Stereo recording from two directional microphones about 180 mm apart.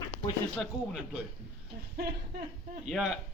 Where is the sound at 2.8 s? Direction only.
Centre (ahead or behind).